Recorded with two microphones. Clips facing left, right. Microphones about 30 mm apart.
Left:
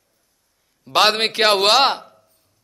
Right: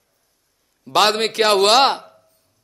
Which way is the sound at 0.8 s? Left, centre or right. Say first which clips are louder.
Even; centre.